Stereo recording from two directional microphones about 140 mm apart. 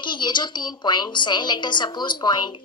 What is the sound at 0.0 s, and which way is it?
A woman's voice, 35° left (ahead or behind).